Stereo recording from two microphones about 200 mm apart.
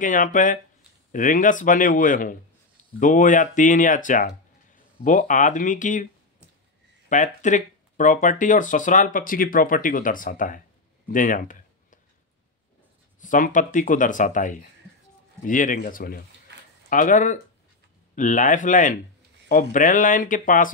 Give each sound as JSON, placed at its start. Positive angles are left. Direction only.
{"t": 0.0, "sound": "speech", "side_deg": 40}
{"t": 7.1, "sound": "speech", "side_deg": 40}
{"t": 11.1, "sound": "a sound", "side_deg": 40}
{"t": 13.2, "sound": "speech", "side_deg": 40}